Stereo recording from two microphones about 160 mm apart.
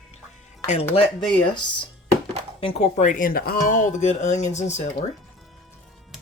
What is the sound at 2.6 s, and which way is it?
Speech, 40° left (ahead or behind).